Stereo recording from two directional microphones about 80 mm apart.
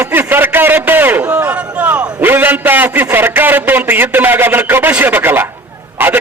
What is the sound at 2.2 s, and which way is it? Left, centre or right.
A man's voice, right.